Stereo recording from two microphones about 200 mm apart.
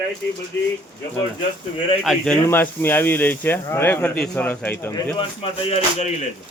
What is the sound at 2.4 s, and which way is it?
Speech, 10° left (ahead or behind).